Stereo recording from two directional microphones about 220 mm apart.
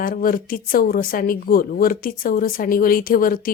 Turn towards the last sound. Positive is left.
turn(degrees=40)  # may be behind; listen again after turning